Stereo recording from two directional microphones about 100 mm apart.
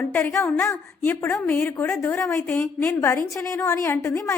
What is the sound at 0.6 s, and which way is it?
Speech, 30° left (ahead or behind).